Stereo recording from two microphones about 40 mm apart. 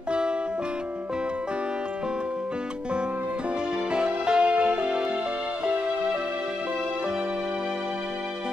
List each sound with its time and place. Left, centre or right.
3.9 s music: right